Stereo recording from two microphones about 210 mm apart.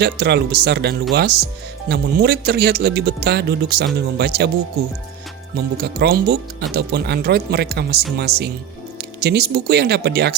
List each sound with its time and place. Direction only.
0.0 s speech: 50° right (ahead or behind)
5.5 s speech: 50° right (ahead or behind)